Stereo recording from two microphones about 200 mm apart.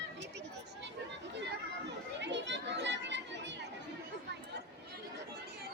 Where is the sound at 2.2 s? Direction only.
60° right (ahead or behind).